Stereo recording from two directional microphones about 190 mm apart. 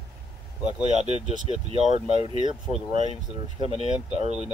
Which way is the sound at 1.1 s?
30° left (ahead or behind).